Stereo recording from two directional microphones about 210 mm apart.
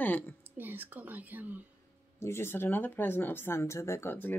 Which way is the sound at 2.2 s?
10° left (ahead or behind).